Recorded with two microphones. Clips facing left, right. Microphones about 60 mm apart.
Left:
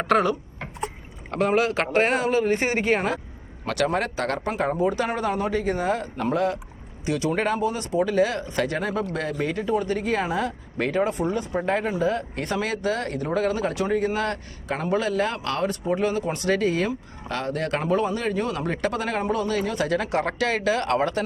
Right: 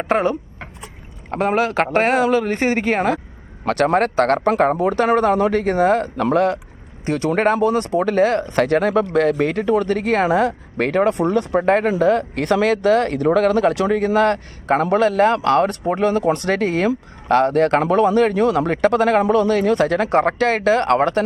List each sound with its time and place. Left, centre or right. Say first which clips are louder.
0.2 s a sound: right 3 dB; right
1.3 s speech: right 3 dB; right
2.2 s speech: right 4 dB; right
2.6 s speech: right 4 dB; right
7.0 s speech: right 6 dB; right
8.9 s speech: right 10 dB; right
13.2 s speech: right 7 dB; right
14.8 s speech: right 8 dB; right
17.8 s speech: right 8 dB; right